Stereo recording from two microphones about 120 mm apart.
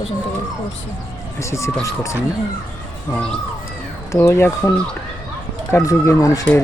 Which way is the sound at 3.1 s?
10° left (ahead or behind).